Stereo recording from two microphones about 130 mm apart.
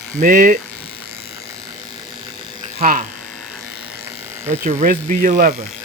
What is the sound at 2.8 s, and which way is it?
Speech, 90° right.